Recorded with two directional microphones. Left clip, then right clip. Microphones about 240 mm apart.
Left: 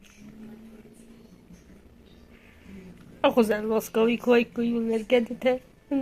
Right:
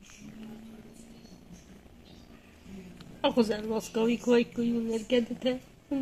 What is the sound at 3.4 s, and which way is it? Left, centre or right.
Speech, left.